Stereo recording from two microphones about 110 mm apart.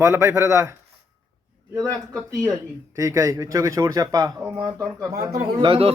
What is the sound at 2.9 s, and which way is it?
Speech, 30° right (ahead or behind).